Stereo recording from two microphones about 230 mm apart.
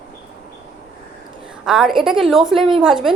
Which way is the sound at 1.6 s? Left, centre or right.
Centre.